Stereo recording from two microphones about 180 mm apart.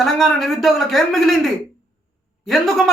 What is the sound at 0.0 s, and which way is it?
A man's voice, centre (ahead or behind).